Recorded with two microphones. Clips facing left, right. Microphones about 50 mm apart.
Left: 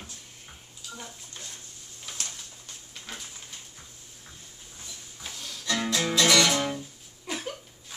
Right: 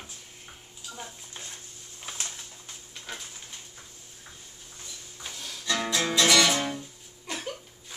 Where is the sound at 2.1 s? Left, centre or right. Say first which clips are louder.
Right 1 dB; right.